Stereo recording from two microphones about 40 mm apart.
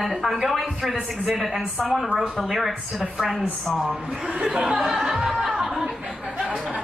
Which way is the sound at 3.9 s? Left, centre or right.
Right.